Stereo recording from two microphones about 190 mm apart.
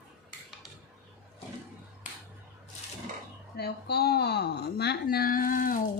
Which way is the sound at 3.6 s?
55° left (ahead or behind).